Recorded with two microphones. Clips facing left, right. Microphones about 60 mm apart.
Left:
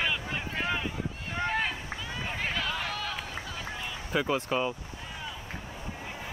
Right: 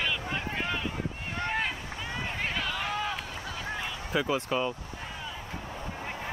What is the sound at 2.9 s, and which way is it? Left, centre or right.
Run, right.